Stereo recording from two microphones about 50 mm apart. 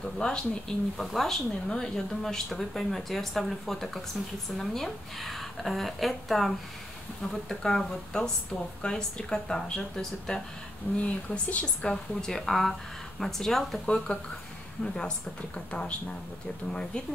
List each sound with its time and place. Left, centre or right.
0.2 s speech: centre
0.9 s speech: centre
7.4 s speech: centre
11.0 s speech: left
11.8 s speech: centre
13.8 s speech: centre